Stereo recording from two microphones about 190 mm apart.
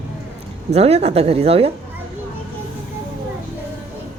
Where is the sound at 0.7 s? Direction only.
35° right (ahead or behind).